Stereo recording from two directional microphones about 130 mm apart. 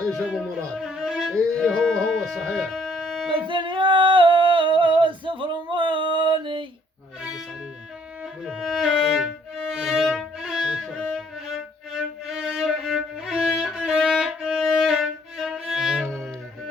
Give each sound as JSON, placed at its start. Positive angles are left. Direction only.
{"t": 0.1, "sound": "music", "side_deg": 0}
{"t": 3.4, "sound": "singing", "side_deg": -40}
{"t": 8.4, "sound": "music", "side_deg": 0}
{"t": 12.2, "sound": "violin", "side_deg": -5}